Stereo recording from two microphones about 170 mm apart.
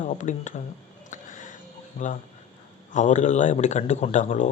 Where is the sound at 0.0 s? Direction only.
45° left (ahead or behind).